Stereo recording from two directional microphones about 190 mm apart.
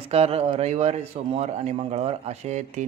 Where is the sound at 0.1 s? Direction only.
30° right (ahead or behind).